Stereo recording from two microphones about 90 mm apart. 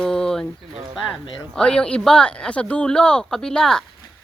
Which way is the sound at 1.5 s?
10° left (ahead or behind).